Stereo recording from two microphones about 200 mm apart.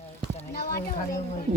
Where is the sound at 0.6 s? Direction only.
50° left (ahead or behind).